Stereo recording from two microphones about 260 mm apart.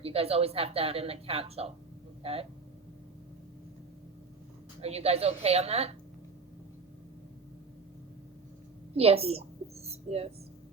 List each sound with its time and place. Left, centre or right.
0.0 s a woman's voice: right
4.8 s a woman's voice: right
9.0 s a woman's voice: right